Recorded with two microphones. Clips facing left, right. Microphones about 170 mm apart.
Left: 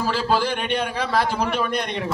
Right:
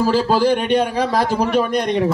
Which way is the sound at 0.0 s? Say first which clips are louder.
Right 6 dB; 40° right (ahead or behind).